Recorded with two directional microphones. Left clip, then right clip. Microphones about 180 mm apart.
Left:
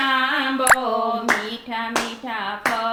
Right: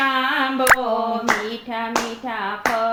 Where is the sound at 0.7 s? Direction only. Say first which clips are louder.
Even; 5° right (ahead or behind).